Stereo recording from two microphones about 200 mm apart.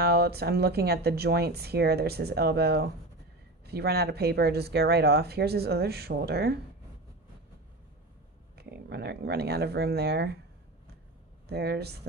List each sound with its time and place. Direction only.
0.0 s speech: 55° right (ahead or behind)
8.5 s speech: 55° right (ahead or behind)
11.4 s speech: 55° right (ahead or behind)